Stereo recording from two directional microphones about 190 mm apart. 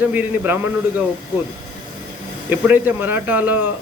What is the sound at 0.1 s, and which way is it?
Speech, 10° right (ahead or behind).